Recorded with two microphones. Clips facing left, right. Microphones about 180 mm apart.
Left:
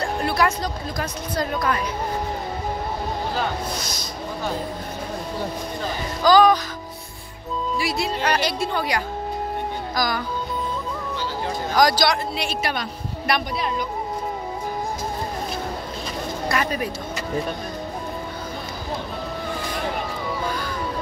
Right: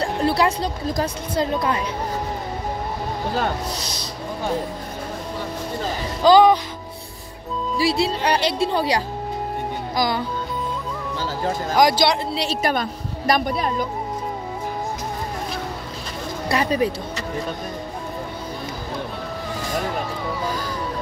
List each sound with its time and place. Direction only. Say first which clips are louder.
0.0 s a woman's voice: right 2 dB; 35° right (ahead or behind)
6.2 s speech: right 2 dB; 25° right (ahead or behind)
7.7 s speech: right 6 dB; 30° right (ahead or behind)
11.7 s speech: right 1 dB; 25° right (ahead or behind)
13.3 s a woman's voice: right 4 dB; 45° right (ahead or behind)
16.4 s speech: right 5 dB; 30° right (ahead or behind)